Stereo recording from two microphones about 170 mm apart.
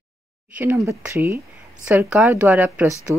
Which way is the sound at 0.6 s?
15° right (ahead or behind).